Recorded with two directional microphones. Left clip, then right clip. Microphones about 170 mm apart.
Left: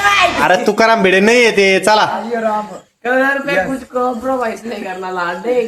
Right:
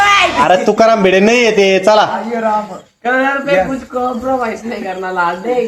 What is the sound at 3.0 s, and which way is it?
Speech, 5° left (ahead or behind).